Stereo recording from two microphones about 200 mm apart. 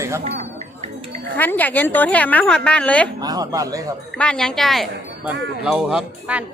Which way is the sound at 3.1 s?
20° right (ahead or behind).